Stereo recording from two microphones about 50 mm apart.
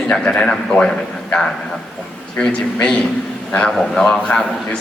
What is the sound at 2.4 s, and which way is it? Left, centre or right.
Speech, centre.